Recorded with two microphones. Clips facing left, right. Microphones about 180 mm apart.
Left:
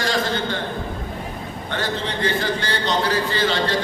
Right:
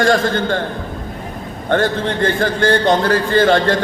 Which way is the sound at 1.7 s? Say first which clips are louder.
Right 9 dB; 50° right (ahead or behind).